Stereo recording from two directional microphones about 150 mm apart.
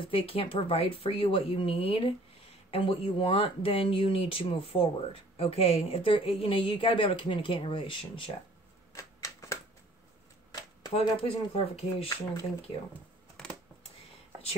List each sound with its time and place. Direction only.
0.0 s a woman's voice: 40° left (ahead or behind)
8.9 s shuffling cards: 20° left (ahead or behind)
11.0 s a woman's voice: 40° left (ahead or behind)